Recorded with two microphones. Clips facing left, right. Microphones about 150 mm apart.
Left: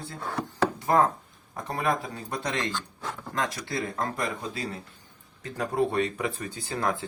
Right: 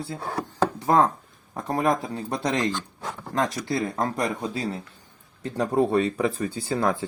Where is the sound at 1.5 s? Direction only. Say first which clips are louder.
Right 5 dB; 35° right (ahead or behind).